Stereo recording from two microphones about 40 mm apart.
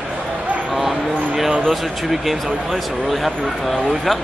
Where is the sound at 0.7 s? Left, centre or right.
Centre.